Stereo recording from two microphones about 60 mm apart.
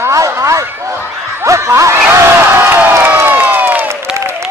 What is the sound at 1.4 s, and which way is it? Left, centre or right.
Speech, right.